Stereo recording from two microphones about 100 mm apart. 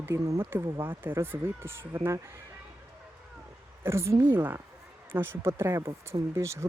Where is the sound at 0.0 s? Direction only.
30° right (ahead or behind).